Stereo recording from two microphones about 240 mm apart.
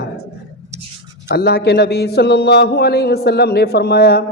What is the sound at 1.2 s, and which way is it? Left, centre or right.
Speech, left.